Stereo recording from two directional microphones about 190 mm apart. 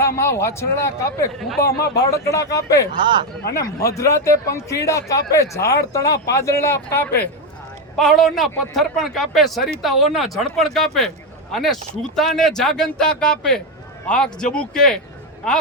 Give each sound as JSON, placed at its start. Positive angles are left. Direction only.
{"t": 0.2, "sound": "speech", "side_deg": 15}
{"t": 3.0, "sound": "speech", "side_deg": -25}
{"t": 3.8, "sound": "speech", "side_deg": 15}
{"t": 7.9, "sound": "a man's voice", "side_deg": 0}